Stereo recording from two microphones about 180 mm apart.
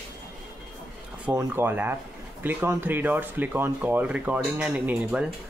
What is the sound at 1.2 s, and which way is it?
Speech, 15° right (ahead or behind).